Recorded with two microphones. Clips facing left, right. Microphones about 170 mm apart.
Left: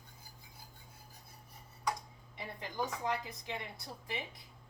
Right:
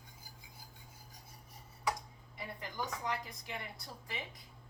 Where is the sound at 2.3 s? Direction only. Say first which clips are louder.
Left 3 dB; 25° left (ahead or behind).